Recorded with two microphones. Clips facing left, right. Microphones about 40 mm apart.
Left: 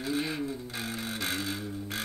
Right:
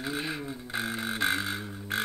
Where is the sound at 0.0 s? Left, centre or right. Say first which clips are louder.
Left 2 dB; centre.